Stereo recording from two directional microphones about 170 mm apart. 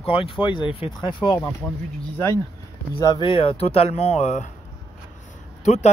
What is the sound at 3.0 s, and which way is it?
Speech, 25° left (ahead or behind).